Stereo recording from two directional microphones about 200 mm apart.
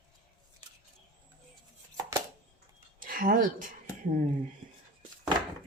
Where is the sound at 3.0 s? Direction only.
45° right (ahead or behind).